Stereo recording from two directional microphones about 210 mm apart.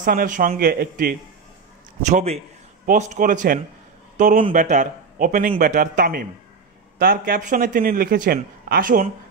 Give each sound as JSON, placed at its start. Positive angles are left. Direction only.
{"t": 0.0, "sound": "speech", "side_deg": -40}
{"t": 2.0, "sound": "a man's voice", "side_deg": -30}